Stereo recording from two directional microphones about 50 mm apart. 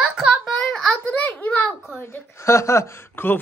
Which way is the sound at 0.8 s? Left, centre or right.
Left.